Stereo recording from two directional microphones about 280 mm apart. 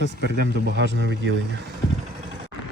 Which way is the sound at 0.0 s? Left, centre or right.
Right.